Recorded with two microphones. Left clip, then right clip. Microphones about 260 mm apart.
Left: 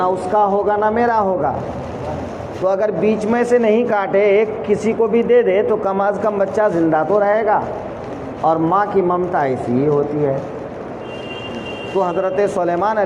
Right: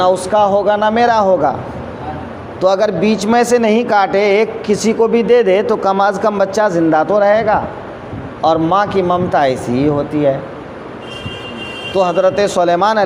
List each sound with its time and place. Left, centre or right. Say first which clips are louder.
0.0 s a man's voice: right 4 dB; right
2.6 s a man's voice: right 4 dB; right
11.9 s speech: right 5 dB; right